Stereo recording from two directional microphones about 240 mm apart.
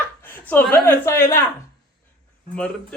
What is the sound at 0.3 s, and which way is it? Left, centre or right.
Speech, centre.